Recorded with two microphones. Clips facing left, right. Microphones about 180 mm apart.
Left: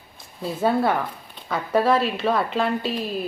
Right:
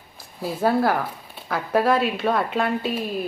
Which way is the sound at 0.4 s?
Centre (ahead or behind).